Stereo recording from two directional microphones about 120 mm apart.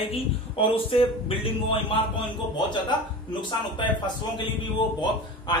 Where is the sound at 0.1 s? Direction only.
50° left (ahead or behind).